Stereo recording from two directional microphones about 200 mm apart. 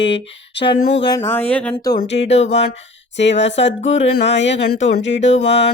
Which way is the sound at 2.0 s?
60° left (ahead or behind).